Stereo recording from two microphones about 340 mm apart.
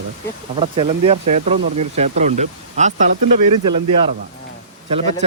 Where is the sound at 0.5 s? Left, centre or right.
Centre.